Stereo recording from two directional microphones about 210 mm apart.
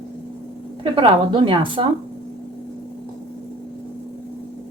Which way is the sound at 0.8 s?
25° right (ahead or behind).